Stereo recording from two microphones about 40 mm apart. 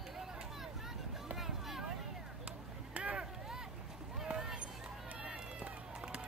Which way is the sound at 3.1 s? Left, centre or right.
Right.